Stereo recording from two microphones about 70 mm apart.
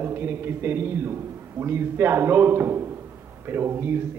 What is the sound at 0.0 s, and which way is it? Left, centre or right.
A man's voice, right.